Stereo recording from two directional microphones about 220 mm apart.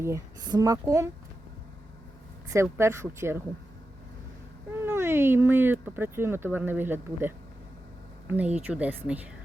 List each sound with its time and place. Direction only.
0.0 s speech: 15° right (ahead or behind)
2.5 s speech: 10° right (ahead or behind)
4.7 s speech: 10° right (ahead or behind)